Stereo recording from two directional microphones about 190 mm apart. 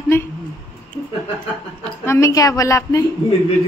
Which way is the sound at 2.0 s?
15° left (ahead or behind).